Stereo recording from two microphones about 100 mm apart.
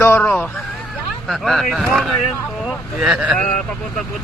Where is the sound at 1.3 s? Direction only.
Centre (ahead or behind).